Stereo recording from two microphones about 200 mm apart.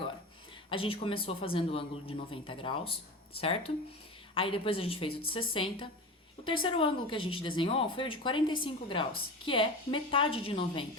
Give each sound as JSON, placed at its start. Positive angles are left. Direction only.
{"t": 0.7, "sound": "speech", "side_deg": 25}